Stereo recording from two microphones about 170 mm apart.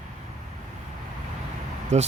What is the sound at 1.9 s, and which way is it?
Speech, 40° right (ahead or behind).